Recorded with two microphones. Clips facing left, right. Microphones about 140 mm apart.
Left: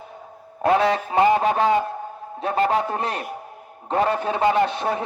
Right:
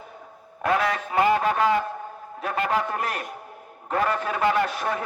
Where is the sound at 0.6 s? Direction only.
30° left (ahead or behind).